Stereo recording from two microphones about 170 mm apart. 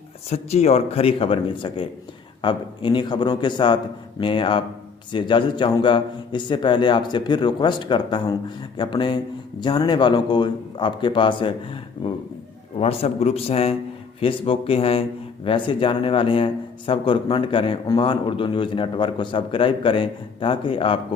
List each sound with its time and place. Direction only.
0.3 s a man's voice: 40° left (ahead or behind)